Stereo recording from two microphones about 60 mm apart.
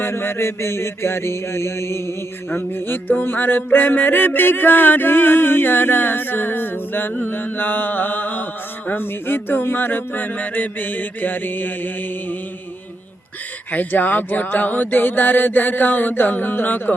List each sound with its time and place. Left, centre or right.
0.0 s mantra: left
2.6 s music: left
13.7 s music: left